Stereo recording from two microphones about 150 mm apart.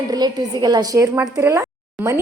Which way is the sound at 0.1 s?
25° right (ahead or behind).